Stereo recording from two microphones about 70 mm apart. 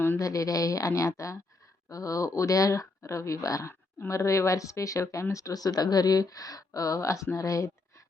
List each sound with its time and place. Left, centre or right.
0.2 s speech: left